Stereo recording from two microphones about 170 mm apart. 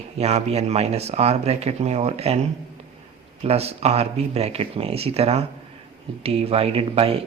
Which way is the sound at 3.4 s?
40° right (ahead or behind).